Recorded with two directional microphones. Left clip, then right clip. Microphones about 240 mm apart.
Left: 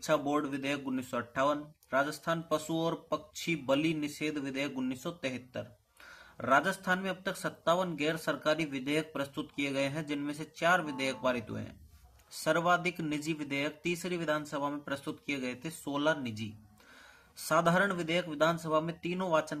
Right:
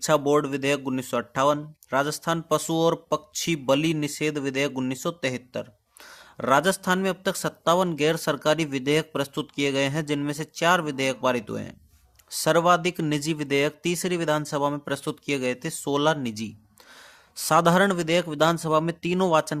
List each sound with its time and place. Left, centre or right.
0.0 s speech: right